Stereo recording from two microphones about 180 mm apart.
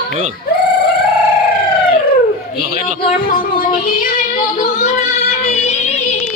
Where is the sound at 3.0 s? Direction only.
50° left (ahead or behind).